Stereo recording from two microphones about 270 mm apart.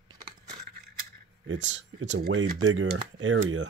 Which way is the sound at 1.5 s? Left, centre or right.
Right.